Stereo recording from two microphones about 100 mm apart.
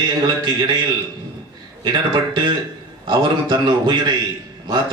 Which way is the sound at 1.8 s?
50° right (ahead or behind).